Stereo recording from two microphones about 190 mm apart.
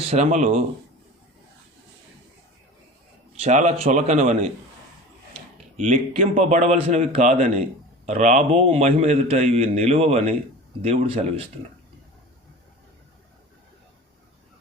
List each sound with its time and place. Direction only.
0.0 s a man's voice: 35° right (ahead or behind)
3.3 s a man's voice: 35° right (ahead or behind)
5.7 s a man's voice: 40° right (ahead or behind)